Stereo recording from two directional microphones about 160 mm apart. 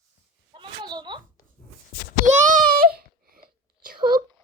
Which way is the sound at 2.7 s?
70° right (ahead or behind).